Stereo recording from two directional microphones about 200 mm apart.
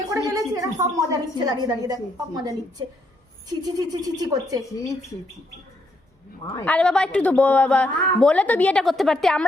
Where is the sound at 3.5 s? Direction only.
20° right (ahead or behind).